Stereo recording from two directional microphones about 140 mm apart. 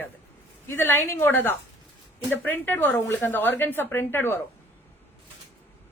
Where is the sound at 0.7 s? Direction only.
15° left (ahead or behind).